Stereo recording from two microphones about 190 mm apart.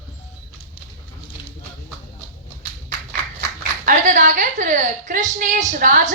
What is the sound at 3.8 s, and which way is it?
A woman's voice, 40° right (ahead or behind).